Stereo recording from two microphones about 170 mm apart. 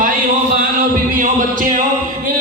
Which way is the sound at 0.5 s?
55° right (ahead or behind).